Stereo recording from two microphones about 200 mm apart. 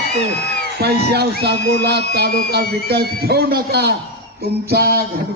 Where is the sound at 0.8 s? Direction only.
55° right (ahead or behind).